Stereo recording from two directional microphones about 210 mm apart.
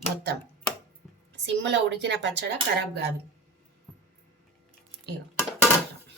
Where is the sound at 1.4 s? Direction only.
60° right (ahead or behind).